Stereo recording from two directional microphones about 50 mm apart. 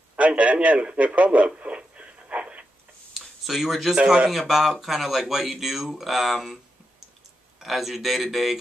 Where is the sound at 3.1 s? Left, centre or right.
Centre.